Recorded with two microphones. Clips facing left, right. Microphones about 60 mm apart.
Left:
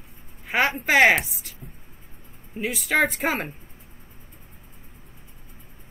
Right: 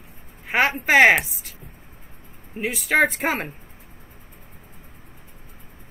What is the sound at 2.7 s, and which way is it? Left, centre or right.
Speech, centre.